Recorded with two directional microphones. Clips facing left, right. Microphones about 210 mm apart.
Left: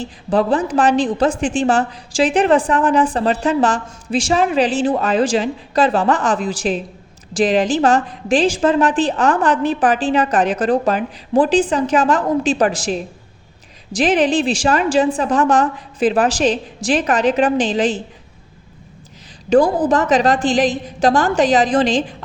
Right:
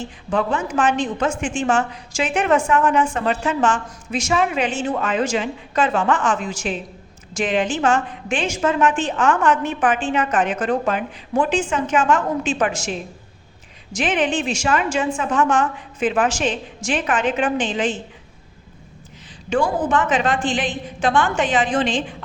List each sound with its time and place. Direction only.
0.0 s a woman's voice: 35° left (ahead or behind)
19.5 s a woman's voice: 35° left (ahead or behind)